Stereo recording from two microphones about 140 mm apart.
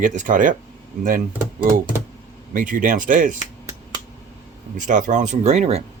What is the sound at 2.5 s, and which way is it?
Speech, 75° right (ahead or behind).